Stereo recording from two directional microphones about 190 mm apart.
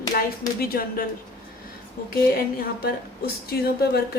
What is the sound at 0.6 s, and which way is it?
Speech, 50° left (ahead or behind).